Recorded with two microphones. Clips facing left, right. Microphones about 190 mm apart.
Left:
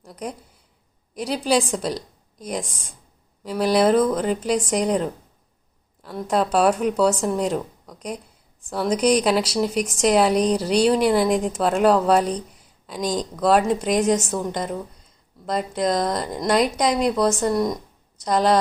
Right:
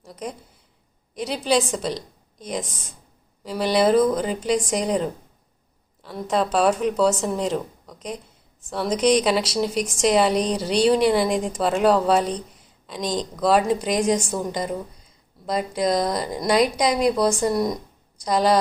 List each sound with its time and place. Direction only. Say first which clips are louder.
0.1 s speech: left 1 dB; 10° left (ahead or behind)
2.6 s speech: even; 5° right (ahead or behind)
6.0 s a woman's voice: left 1 dB; centre (ahead or behind)